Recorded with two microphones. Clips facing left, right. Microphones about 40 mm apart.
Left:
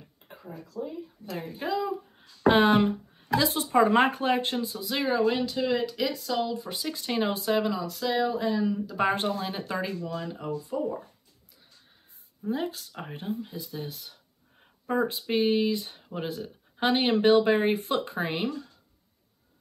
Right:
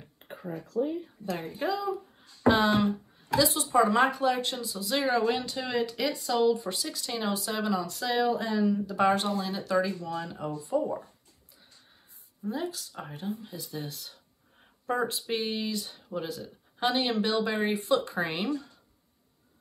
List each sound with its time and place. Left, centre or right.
0.3 s speech: right
2.2 s speech: left
4.8 s speech: centre
6.8 s speech: left
7.6 s speech: centre
9.0 s speech: left
10.4 s speech: centre
12.4 s speech: left
13.6 s speech: centre
13.8 s speech: centre
15.2 s speech: centre; by 18.2 s left
18.2 s speech: centre